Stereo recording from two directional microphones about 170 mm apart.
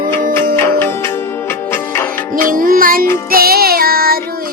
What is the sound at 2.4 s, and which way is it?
Music, 55° right (ahead or behind).